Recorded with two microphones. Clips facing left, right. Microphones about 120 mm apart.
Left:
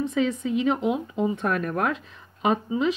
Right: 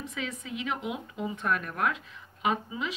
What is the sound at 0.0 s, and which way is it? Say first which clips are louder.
Speech: left 13 dB; 30° left (ahead or behind).